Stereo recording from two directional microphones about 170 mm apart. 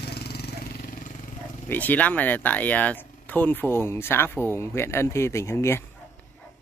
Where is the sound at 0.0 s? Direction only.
70° left (ahead or behind); by 1.3 s 50° left (ahead or behind).